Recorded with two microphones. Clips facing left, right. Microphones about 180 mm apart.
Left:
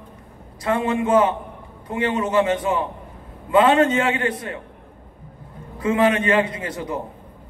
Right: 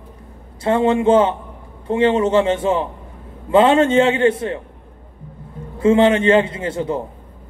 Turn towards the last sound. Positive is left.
turn(degrees=-25)  # may be behind; listen again after turning